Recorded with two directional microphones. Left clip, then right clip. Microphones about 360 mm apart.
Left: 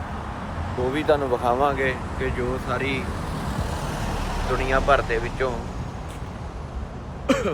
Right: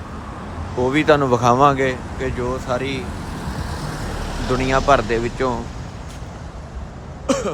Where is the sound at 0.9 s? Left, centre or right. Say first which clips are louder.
Right 6 dB; centre.